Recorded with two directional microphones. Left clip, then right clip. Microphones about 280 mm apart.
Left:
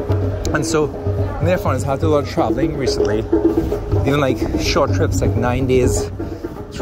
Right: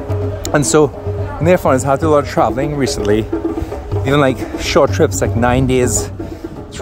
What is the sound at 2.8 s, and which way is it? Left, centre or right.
Speech, right.